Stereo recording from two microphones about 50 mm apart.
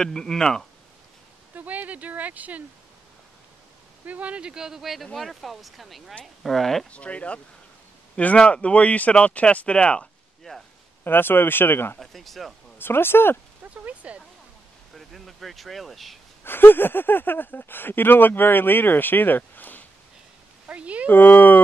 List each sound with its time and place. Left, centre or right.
0.0 s speech: centre
1.5 s speech: right
4.0 s speech: right; by 6.9 s centre
6.9 s speech: left
11.1 s speech: left
12.0 s speech: centre
12.7 s speech: left
13.8 s speech: right
15.0 s speech: centre
16.4 s speech: left
20.6 s speech: right
21.1 s speech: left